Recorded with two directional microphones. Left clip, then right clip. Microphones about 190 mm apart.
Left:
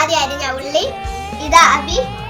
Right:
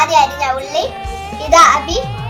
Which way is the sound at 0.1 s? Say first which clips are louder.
Right 5 dB; 15° right (ahead or behind).